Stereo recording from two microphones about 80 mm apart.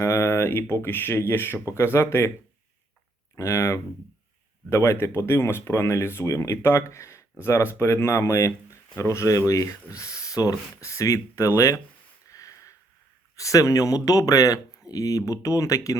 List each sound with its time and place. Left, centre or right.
0.0 s speech: left
3.3 s speech: left
12.3 s sniff: left
13.3 s speech: left